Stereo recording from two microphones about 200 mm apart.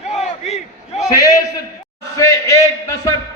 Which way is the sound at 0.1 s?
35° left (ahead or behind).